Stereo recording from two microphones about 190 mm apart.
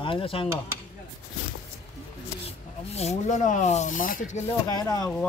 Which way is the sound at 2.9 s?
35° left (ahead or behind).